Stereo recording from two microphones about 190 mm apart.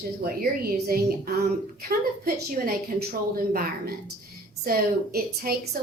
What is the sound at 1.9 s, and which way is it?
A woman's voice, 50° right (ahead or behind).